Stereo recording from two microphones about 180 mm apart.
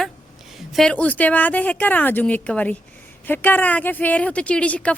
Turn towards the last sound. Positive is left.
turn(degrees=5)  # may be behind; listen again after turning